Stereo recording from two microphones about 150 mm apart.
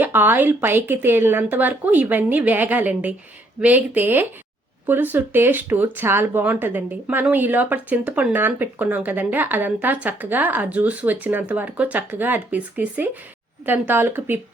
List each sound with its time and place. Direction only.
0.0 s speech: 15° right (ahead or behind)